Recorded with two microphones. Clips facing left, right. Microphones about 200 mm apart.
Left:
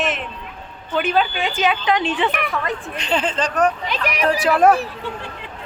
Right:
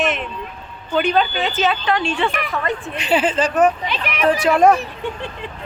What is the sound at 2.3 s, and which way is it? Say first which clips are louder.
Speech: right 1 dB; 5° right (ahead or behind).